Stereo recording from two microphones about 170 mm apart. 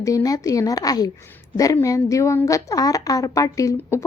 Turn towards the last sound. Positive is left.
turn(degrees=20)  # may be behind; listen again after turning